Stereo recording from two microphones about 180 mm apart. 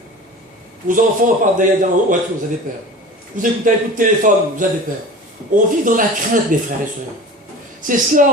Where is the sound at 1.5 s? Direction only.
45° right (ahead or behind).